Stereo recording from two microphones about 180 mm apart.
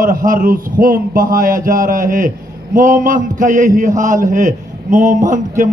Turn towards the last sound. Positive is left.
turn(degrees=-45)  # may be behind; listen again after turning